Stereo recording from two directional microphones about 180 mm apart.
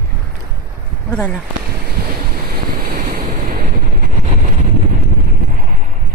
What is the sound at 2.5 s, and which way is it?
Wind noise, 55° right (ahead or behind).